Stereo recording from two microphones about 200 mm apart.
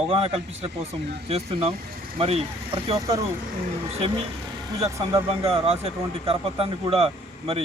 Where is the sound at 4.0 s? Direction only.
30° right (ahead or behind).